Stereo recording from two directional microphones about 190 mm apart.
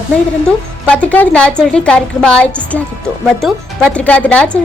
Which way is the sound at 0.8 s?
5° left (ahead or behind).